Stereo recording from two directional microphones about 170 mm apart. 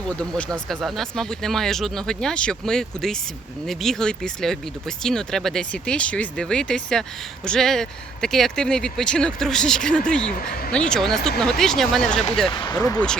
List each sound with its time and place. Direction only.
0.2 s speech: 5° left (ahead or behind)
12.5 s speech: 25° left (ahead or behind)